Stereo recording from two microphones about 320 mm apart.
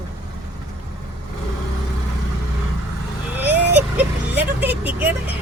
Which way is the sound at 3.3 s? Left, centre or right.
Centre.